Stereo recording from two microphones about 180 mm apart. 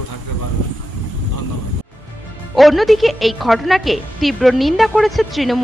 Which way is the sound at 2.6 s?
Centre (ahead or behind).